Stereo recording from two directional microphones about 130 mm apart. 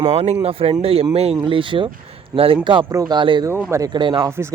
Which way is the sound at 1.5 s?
40° right (ahead or behind).